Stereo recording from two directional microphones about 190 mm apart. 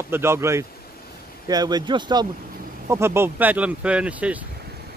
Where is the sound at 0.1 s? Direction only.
15° right (ahead or behind).